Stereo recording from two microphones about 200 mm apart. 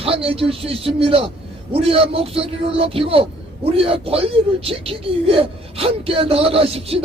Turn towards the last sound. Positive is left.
turn(degrees=-30)  # may be behind; listen again after turning